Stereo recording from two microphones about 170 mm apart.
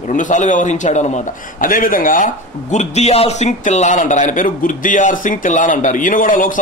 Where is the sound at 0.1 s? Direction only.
50° left (ahead or behind).